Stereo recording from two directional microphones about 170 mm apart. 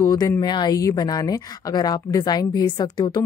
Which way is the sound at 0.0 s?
20° left (ahead or behind).